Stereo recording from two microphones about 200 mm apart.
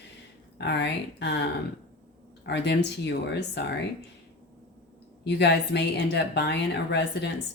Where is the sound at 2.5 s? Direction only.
60° left (ahead or behind).